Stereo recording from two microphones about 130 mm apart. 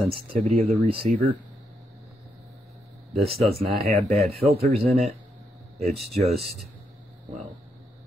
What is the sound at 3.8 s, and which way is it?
Speech, 50° right (ahead or behind).